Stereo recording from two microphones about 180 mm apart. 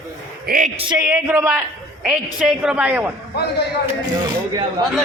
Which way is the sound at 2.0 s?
5° right (ahead or behind).